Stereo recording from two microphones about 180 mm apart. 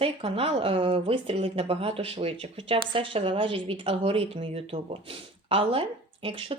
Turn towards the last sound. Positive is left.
turn(degrees=-30)  # may be behind; listen again after turning